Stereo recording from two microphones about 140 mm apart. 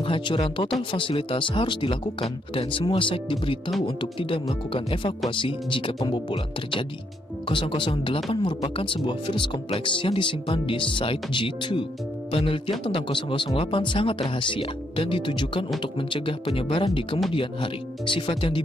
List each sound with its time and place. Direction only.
0.0 s speech: 35° left (ahead or behind)